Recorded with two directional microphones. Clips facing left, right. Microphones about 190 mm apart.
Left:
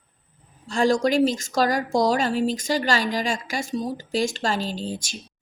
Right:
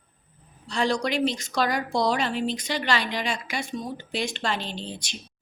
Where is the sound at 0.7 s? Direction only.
45° left (ahead or behind).